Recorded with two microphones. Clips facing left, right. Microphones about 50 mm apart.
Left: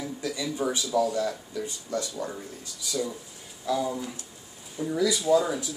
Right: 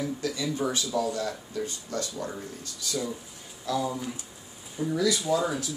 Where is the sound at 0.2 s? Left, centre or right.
Centre.